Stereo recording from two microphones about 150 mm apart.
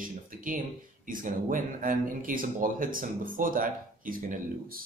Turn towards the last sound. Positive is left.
turn(degrees=-65)  # may be behind; listen again after turning